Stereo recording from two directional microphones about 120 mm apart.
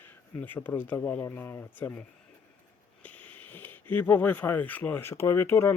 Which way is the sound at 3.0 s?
15° left (ahead or behind).